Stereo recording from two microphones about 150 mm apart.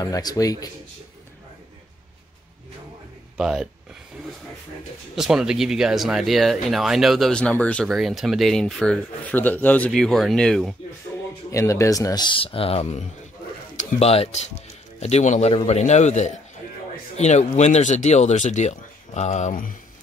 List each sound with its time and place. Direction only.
0.0 s speech: 25° left (ahead or behind)
3.3 s speech: 5° right (ahead or behind)
5.1 s speech: 5° right (ahead or behind)
11.5 s speech: 20° left (ahead or behind); by 19.7 s 60° left (ahead or behind)